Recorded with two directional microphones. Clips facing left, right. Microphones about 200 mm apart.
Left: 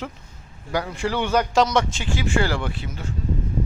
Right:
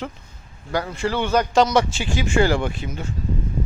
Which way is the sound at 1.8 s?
10° right (ahead or behind).